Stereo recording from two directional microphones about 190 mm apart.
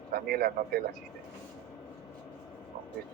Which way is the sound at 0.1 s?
50° right (ahead or behind).